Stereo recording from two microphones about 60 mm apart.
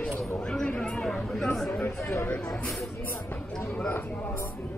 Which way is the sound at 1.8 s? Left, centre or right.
Left.